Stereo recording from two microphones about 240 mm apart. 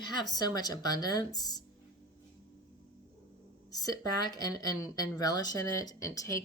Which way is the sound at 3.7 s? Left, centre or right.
Centre.